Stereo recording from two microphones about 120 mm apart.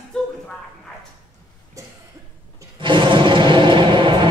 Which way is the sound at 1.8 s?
25° right (ahead or behind).